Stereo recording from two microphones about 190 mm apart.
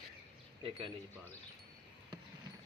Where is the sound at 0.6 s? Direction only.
30° right (ahead or behind).